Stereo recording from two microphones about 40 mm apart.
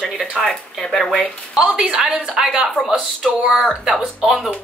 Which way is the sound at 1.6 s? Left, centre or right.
Right.